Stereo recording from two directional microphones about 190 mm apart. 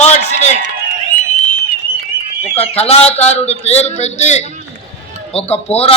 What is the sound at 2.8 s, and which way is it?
A man's voice, 30° left (ahead or behind).